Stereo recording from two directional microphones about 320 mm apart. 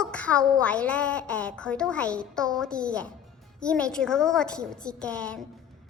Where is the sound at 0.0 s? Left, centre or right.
Centre.